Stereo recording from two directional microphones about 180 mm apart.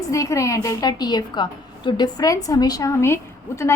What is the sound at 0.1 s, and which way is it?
A woman's voice, 15° left (ahead or behind).